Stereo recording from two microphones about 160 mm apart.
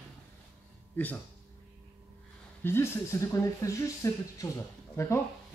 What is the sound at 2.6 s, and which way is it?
Speech, 15° left (ahead or behind).